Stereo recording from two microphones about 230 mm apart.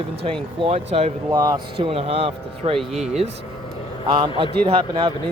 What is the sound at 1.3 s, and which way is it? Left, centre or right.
Speech, centre.